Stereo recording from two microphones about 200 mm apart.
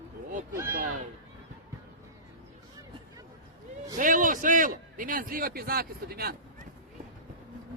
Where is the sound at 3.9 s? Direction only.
40° right (ahead or behind).